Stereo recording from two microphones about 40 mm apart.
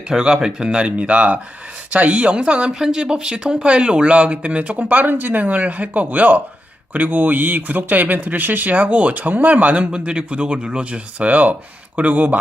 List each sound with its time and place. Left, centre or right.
0.1 s speech: centre
2.7 s speech: centre; by 8.7 s right
8.7 s speech: right